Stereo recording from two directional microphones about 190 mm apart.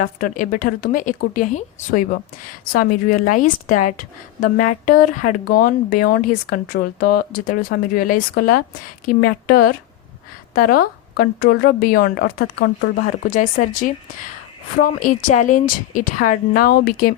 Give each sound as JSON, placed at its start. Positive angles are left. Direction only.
{"t": 0.0, "sound": "speech", "side_deg": 45}